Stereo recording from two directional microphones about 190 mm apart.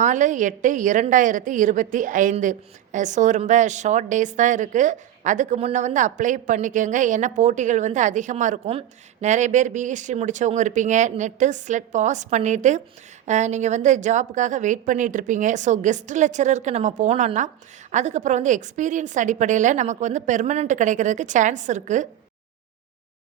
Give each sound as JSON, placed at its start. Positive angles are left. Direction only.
{"t": 0.0, "sound": "a woman's voice", "side_deg": -40}